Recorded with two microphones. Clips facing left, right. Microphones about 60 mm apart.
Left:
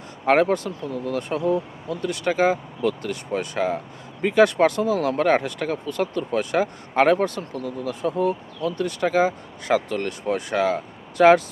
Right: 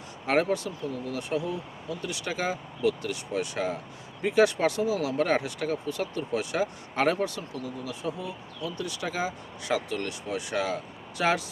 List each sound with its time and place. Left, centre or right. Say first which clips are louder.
0.3 s speech: left 7 dB; left